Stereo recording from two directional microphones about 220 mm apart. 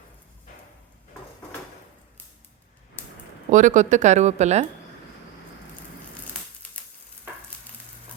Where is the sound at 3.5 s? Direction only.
35° right (ahead or behind).